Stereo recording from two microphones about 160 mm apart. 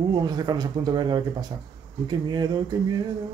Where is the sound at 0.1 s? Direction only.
25° right (ahead or behind).